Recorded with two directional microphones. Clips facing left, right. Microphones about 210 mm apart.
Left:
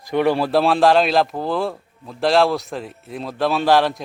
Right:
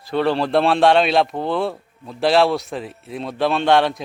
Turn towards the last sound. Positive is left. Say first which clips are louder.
# even
turn(degrees=0)  # may be behind; listen again after turning